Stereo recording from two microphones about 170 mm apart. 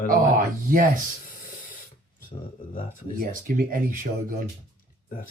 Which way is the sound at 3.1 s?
55° right (ahead or behind).